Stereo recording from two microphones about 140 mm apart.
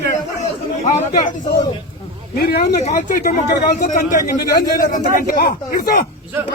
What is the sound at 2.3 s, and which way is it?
Speech, 90° left.